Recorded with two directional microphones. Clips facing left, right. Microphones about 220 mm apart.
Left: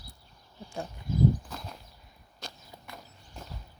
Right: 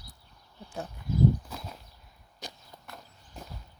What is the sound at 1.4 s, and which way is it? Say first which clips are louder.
Walk: even; 5° right (ahead or behind).